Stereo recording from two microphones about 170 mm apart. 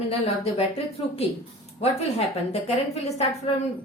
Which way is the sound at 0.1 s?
35° left (ahead or behind).